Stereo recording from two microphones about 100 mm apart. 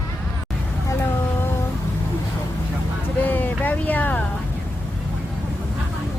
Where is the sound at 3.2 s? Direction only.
20° left (ahead or behind).